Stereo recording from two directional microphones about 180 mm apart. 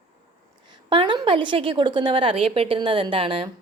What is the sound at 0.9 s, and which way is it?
A woman's voice, 25° right (ahead or behind).